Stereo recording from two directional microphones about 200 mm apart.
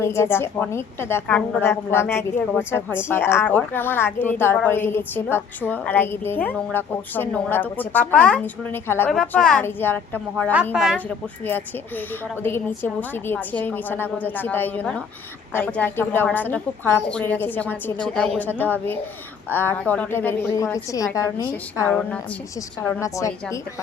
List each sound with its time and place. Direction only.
0.0 s a woman's voice: 15° left (ahead or behind)
10.5 s a woman's voice: 5° right (ahead or behind)
12.4 s a woman's voice: 10° left (ahead or behind)